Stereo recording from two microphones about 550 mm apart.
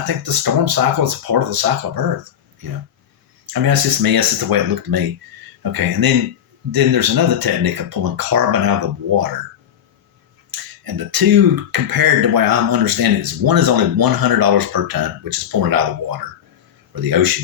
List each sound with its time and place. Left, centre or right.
0.0 s speech: right
3.4 s speech: right
10.5 s speech: right